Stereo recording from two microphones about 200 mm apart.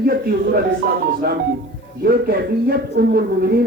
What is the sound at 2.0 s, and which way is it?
Speech, 50° right (ahead or behind).